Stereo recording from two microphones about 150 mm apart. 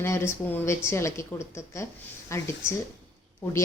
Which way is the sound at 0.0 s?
15° left (ahead or behind).